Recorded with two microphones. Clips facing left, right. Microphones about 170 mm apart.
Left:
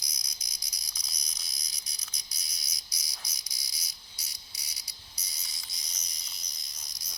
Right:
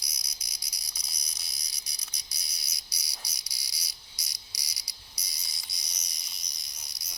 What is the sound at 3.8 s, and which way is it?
Insect, 75° right (ahead or behind).